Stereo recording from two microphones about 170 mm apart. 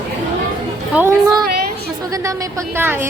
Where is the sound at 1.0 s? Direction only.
15° right (ahead or behind).